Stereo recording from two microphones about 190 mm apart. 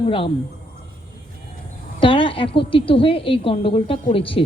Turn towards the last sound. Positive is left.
turn(degrees=30)  # may be behind; listen again after turning